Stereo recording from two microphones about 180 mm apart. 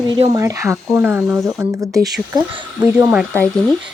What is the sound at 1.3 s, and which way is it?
Speech, 15° right (ahead or behind).